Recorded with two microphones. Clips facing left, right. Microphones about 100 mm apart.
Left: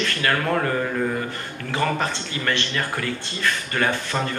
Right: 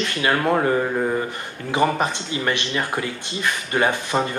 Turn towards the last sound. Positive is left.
turn(degrees=-15)  # may be behind; listen again after turning